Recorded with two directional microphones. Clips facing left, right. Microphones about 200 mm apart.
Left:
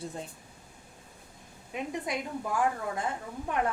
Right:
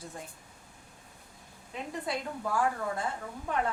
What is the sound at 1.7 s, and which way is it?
Speech, 15° left (ahead or behind).